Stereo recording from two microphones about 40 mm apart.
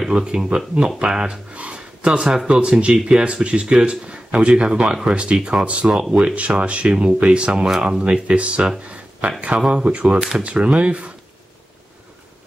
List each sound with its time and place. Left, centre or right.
0.1 s speech: right
1.5 s speech: right
8.8 s a sound: right
9.7 s speech: right